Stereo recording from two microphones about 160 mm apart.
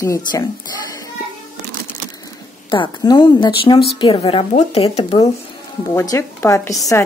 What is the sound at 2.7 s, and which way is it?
A woman's voice, 25° left (ahead or behind).